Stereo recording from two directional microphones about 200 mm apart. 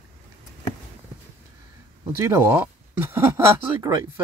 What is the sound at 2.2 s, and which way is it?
Speech, 15° right (ahead or behind).